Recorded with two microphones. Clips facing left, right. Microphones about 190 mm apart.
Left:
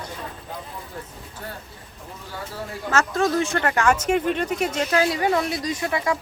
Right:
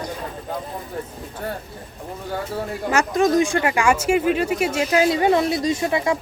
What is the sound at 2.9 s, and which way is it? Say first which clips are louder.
Speech: right 3 dB; 15° right (ahead or behind).